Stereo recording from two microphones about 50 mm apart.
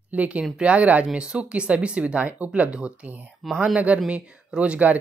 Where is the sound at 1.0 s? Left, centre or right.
Centre.